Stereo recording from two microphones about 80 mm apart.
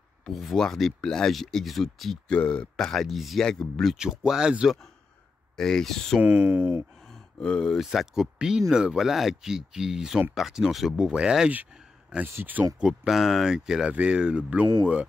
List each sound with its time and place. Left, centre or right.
0.2 s speech: centre
2.3 s speech: centre
4.0 s speech: centre
5.6 s speech: centre
6.2 s speech: right
7.3 s speech: centre
12.4 s speech: right
12.8 s speech: centre